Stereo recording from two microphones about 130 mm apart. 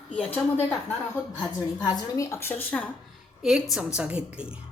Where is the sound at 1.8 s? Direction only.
25° left (ahead or behind).